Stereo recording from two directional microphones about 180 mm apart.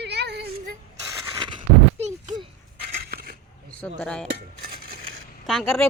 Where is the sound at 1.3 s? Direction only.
25° right (ahead or behind).